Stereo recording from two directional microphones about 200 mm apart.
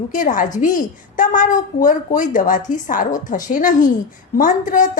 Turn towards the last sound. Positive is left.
turn(degrees=40)  # may be behind; listen again after turning